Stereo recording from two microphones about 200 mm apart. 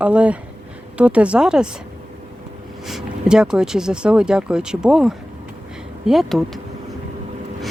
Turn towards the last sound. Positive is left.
turn(degrees=0)  # may be behind; listen again after turning